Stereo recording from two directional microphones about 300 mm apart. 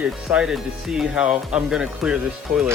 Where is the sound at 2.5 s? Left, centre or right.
Right.